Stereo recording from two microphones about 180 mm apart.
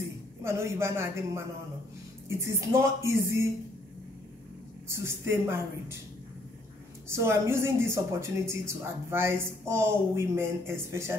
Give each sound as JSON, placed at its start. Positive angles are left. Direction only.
{"t": 0.4, "sound": "speech", "side_deg": -15}
{"t": 4.8, "sound": "speech", "side_deg": -15}
{"t": 7.1, "sound": "speech", "side_deg": -15}